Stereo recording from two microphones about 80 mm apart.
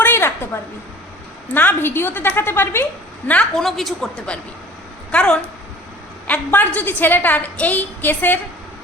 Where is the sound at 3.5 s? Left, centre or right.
Centre.